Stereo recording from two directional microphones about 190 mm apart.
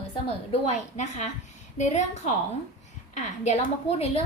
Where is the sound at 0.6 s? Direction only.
35° left (ahead or behind).